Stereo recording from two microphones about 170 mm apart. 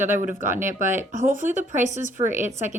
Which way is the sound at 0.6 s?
50° right (ahead or behind).